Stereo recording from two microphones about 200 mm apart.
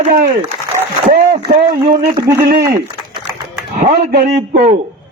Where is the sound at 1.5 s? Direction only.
45° right (ahead or behind).